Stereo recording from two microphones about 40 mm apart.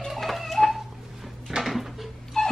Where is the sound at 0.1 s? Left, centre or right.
Centre.